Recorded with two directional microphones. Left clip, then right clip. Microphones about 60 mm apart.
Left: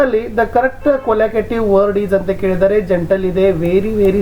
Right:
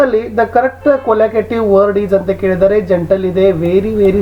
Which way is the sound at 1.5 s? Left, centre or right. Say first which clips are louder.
Right 2 dB; centre.